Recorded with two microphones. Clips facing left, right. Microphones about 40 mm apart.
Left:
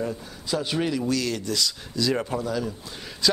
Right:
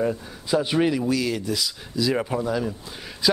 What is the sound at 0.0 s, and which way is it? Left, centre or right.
A man's voice, centre.